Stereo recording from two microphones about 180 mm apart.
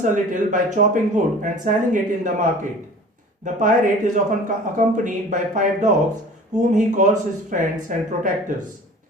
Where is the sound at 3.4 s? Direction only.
45° right (ahead or behind).